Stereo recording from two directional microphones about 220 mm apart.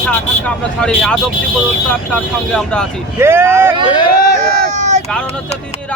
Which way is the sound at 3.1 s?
10° right (ahead or behind).